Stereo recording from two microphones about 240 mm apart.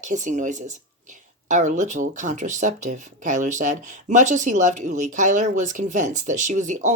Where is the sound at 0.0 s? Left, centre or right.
Right.